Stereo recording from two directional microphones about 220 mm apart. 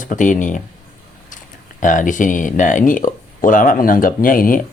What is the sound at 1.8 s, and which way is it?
Speech, 35° left (ahead or behind).